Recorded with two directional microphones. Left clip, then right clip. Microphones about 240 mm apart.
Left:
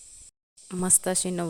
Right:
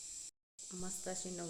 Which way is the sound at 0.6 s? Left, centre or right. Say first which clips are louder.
Left 18 dB; left.